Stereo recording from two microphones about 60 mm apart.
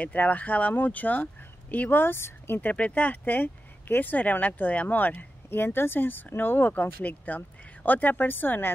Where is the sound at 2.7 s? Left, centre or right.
Left.